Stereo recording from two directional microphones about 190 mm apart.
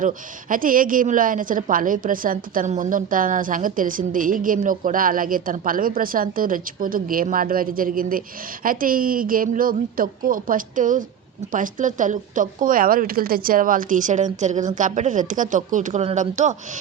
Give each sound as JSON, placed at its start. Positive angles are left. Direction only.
{"t": 0.0, "sound": "a woman's voice", "side_deg": -45}